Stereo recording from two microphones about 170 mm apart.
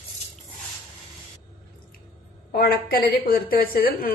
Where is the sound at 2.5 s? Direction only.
60° left (ahead or behind).